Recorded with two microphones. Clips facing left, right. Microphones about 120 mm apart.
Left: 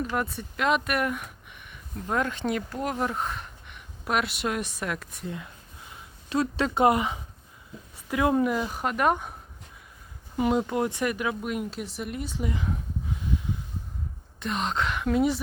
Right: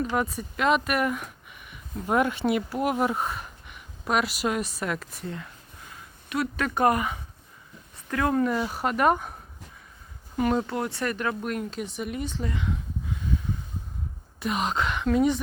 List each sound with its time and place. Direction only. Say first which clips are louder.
0.2 s speech: right 2 dB; centre (ahead or behind)
1.7 s speech: right 4 dB; 15° right (ahead or behind)
5.9 s a sound: left 3 dB; 30° left (ahead or behind)
6.7 s speech: even; 20° left (ahead or behind)
8.6 s speech: right 2 dB; 5° right (ahead or behind)
10.3 s speech: left 1 dB; 10° left (ahead or behind)
14.3 s speech: right 2 dB; 5° right (ahead or behind)